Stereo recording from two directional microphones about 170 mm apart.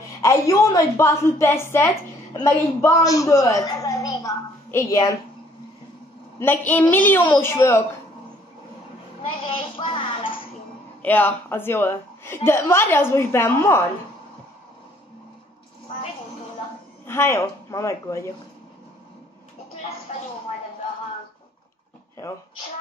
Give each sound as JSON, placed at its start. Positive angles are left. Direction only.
{"t": 0.2, "sound": "a woman's voice", "side_deg": 15}
{"t": 6.4, "sound": "a woman's voice", "side_deg": 10}
{"t": 9.3, "sound": "a sound", "side_deg": 30}
{"t": 11.0, "sound": "a woman's voice", "side_deg": 10}
{"t": 17.0, "sound": "a woman's voice", "side_deg": 15}
{"t": 20.1, "sound": "a sound", "side_deg": 40}